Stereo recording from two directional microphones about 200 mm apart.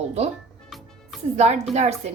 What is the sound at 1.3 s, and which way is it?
Speech, 35° right (ahead or behind).